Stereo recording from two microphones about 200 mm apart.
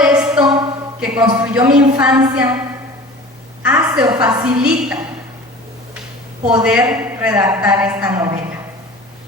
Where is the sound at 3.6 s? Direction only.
5° right (ahead or behind).